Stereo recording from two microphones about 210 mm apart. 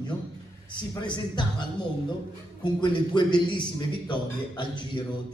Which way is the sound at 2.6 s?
20° left (ahead or behind).